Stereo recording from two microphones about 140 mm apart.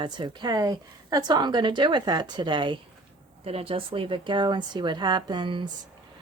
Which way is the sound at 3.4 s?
45° right (ahead or behind).